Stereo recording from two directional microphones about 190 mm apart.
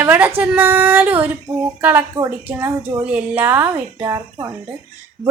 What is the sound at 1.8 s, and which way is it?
Speech, 10° right (ahead or behind).